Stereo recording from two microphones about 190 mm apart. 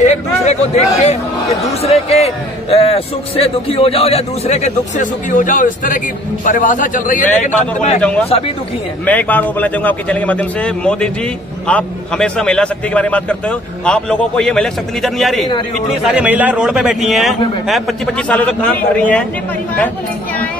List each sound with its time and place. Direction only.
0.0 s a man's voice: 35° left (ahead or behind)
8.0 s a man's voice: 5° left (ahead or behind)